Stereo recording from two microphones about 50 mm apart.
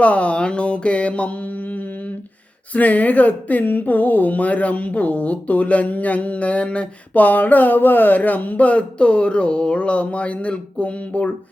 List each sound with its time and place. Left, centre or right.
0.0 s speech: left
2.7 s speech: left